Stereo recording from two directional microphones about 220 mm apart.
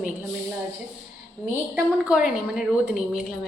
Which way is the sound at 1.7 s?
5° right (ahead or behind).